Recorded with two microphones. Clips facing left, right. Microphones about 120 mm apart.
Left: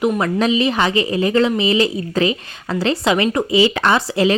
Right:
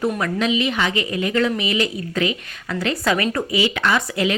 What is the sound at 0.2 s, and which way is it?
A woman's voice, 35° left (ahead or behind).